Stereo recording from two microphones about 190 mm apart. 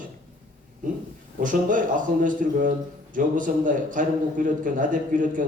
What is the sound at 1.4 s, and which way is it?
A man's voice, 45° right (ahead or behind).